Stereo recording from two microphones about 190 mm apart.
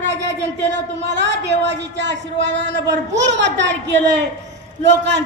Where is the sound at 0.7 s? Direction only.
70° right (ahead or behind).